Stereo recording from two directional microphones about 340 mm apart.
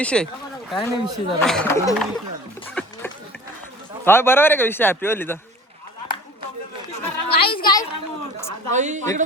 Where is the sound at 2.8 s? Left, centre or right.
Centre.